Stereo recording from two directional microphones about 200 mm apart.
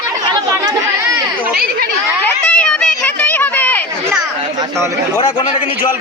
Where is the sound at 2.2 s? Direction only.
5° left (ahead or behind).